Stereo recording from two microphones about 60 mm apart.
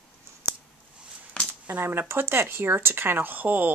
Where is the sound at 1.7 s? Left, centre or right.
Right.